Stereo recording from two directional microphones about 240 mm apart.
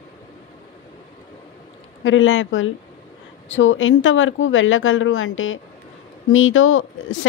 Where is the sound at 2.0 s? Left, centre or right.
Left.